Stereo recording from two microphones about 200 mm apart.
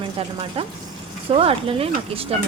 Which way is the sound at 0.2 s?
25° right (ahead or behind).